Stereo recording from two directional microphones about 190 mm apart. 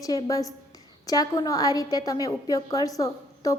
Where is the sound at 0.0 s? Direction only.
20° left (ahead or behind).